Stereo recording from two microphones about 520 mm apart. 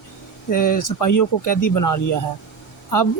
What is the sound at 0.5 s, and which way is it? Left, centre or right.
Speech, left.